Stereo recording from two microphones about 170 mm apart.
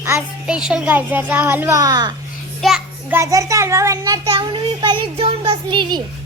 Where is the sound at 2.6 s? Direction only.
Centre (ahead or behind).